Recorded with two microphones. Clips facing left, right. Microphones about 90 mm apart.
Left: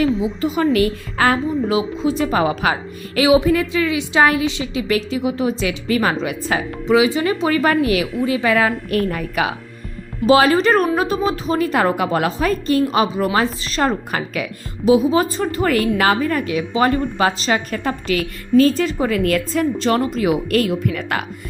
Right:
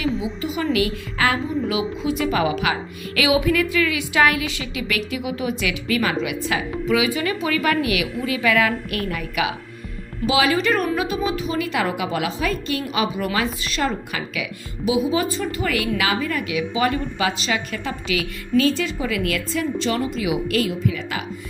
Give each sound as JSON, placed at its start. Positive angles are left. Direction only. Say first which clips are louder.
{"t": 0.0, "sound": "a woman's voice", "louder": "left 6 dB", "side_deg": 40}